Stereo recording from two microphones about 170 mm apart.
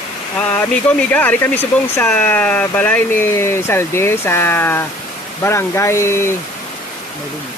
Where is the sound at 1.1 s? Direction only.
10° left (ahead or behind).